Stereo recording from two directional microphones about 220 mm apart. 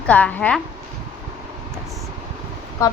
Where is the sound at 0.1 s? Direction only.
5° left (ahead or behind).